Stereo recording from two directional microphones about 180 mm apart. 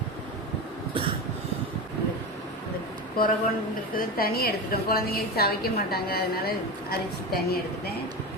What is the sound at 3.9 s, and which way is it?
A woman's voice, 55° left (ahead or behind).